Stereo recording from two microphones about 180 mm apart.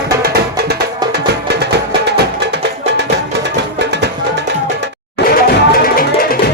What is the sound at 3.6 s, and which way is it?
Music, 70° right (ahead or behind).